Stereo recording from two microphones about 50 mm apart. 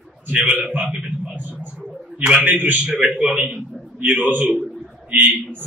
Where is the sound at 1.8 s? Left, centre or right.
Right.